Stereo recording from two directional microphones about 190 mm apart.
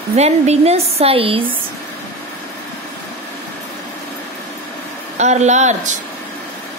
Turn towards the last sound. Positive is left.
turn(degrees=-35)  # may be behind; listen again after turning